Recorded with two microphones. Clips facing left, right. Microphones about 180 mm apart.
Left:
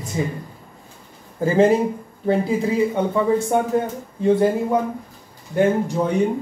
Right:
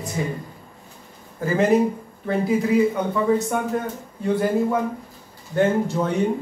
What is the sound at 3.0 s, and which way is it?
Speech, 30° left (ahead or behind).